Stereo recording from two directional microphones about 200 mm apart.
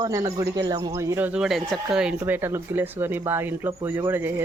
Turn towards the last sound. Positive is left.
turn(degrees=-10)  # may be behind; listen again after turning